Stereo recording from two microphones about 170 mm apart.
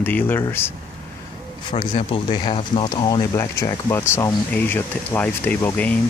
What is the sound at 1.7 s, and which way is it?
Speech, 30° left (ahead or behind).